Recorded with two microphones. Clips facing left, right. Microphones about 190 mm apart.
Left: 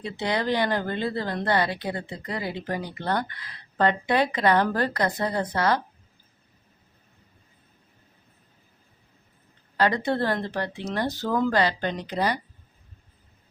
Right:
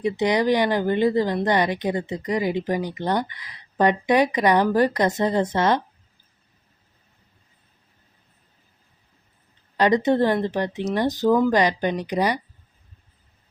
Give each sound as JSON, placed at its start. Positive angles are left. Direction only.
{"t": 0.0, "sound": "speech", "side_deg": -15}
{"t": 9.7, "sound": "speech", "side_deg": -20}